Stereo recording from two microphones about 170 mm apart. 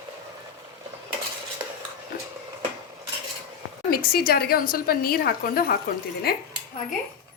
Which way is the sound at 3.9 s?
60° left (ahead or behind).